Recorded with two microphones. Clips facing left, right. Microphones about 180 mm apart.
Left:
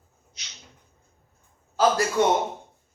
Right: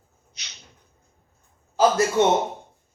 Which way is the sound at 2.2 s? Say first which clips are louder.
Right 2 dB; 25° right (ahead or behind).